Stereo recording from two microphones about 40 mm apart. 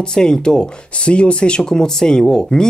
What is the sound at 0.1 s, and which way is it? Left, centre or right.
Speech, centre.